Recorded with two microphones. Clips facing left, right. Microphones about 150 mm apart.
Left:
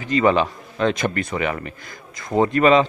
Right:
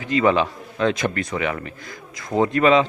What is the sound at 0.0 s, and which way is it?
A man's voice, centre (ahead or behind).